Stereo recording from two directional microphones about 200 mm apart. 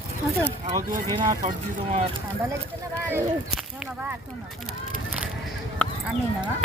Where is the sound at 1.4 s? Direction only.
40° right (ahead or behind).